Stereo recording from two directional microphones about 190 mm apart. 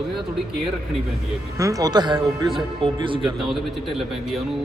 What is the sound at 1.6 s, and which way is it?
A man's voice, 20° right (ahead or behind).